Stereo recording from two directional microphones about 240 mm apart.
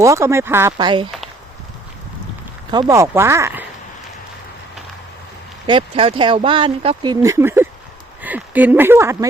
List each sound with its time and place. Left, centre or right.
0.0 s speech: centre
2.7 s speech: centre
5.6 s speech: right